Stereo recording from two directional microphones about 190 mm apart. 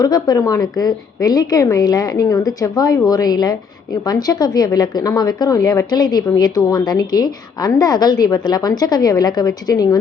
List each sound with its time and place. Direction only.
0.0 s a woman's voice: 20° left (ahead or behind)